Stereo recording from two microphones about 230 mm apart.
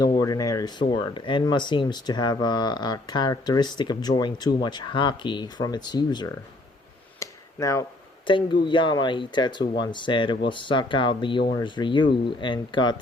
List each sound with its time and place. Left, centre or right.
0.0 s speech: centre
7.2 s a sound: centre
8.3 s speech: left